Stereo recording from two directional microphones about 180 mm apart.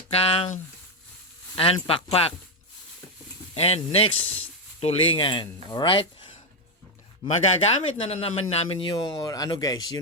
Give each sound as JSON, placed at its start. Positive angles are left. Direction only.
{"t": 0.1, "sound": "speech", "side_deg": 35}
{"t": 3.5, "sound": "speech", "side_deg": 35}
{"t": 7.6, "sound": "speech", "side_deg": 35}